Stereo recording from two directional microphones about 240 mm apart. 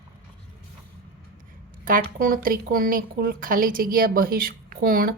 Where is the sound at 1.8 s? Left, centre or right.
Right.